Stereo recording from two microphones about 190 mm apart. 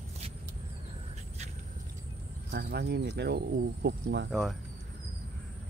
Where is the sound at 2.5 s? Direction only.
55° right (ahead or behind).